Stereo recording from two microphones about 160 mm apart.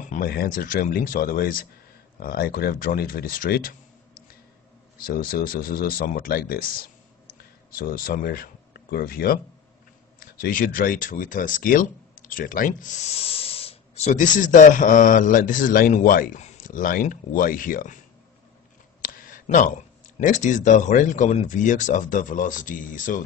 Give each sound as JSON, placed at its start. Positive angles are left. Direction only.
{"t": 0.1, "sound": "speech", "side_deg": 65}
{"t": 5.0, "sound": "speech", "side_deg": 65}
{"t": 19.0, "sound": "a sound", "side_deg": 60}
{"t": 20.2, "sound": "speech", "side_deg": 55}